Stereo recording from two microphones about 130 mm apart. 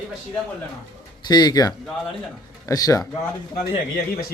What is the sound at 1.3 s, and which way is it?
Speech, 30° left (ahead or behind).